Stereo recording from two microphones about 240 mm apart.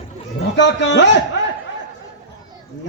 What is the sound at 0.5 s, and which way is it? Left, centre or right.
Speech, left.